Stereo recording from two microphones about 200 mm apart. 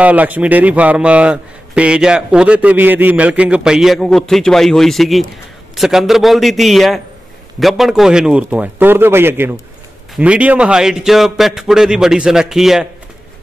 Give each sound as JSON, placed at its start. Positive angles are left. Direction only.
{"t": 0.0, "sound": "a man's voice", "side_deg": -5}